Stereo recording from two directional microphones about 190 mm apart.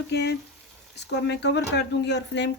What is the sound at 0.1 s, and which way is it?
Speech, 60° left (ahead or behind).